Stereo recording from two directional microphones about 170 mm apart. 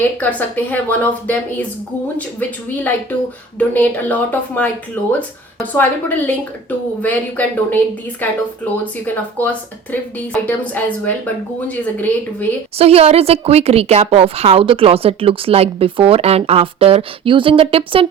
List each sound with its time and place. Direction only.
0.2 s speech: 10° left (ahead or behind)
2.6 s speech: 10° left (ahead or behind)
12.8 s a woman's voice: 35° right (ahead or behind)